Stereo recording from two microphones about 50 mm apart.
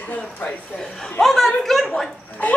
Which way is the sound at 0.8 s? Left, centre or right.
Centre.